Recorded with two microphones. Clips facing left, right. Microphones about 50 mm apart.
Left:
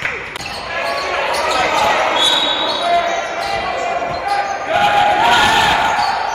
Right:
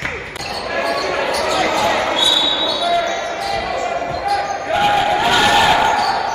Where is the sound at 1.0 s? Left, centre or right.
Left.